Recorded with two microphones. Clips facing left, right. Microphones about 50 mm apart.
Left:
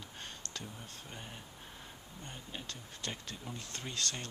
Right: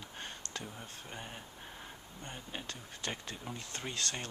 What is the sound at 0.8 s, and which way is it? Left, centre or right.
Speech, centre.